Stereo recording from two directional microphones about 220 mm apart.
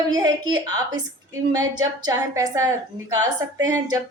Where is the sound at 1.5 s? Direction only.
15° right (ahead or behind).